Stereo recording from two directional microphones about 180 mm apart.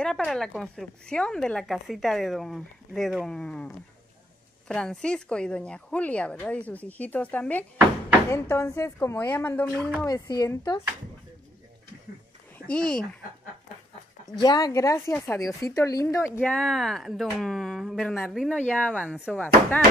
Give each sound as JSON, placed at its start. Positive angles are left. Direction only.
{"t": 0.0, "sound": "a woman's voice", "side_deg": 5}
{"t": 10.0, "sound": "speech", "side_deg": 20}
{"t": 12.5, "sound": "speech", "side_deg": 5}
{"t": 14.4, "sound": "a woman's voice", "side_deg": 20}